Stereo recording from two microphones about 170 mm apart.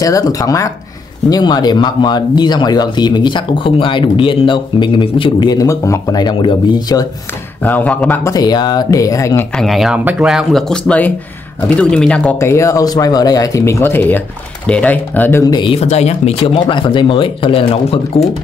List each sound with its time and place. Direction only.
0.0 s speech: 20° left (ahead or behind)
7.6 s speech: 10° left (ahead or behind)
9.6 s speech: centre (ahead or behind)
15.4 s speech: 25° left (ahead or behind)